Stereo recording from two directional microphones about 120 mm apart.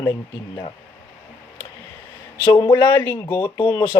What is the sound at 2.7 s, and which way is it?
Speech, 20° left (ahead or behind).